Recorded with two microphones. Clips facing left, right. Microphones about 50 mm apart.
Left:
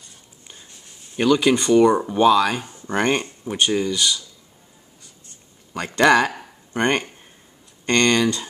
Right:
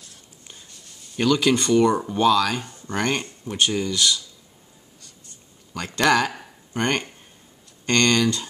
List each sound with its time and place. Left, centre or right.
0.5 s whispering: left
1.2 s speech: centre
3.5 s speech: centre
5.8 s speech: centre